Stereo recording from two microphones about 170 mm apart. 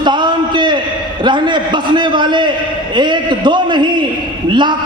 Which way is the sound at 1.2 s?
25° right (ahead or behind).